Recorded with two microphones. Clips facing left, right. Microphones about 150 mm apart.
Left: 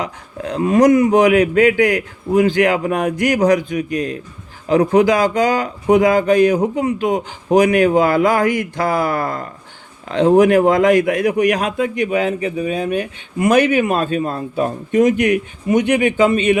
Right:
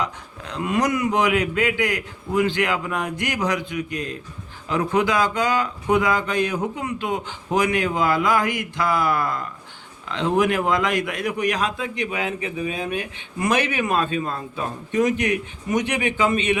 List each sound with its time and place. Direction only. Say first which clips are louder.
0.0 s speech: left 4 dB; 45° left (ahead or behind)
12.1 s speech: left 8 dB; 35° left (ahead or behind)
15.0 s speech: left 7 dB; 30° right (ahead or behind)
16.0 s speech: left 7 dB; 35° left (ahead or behind)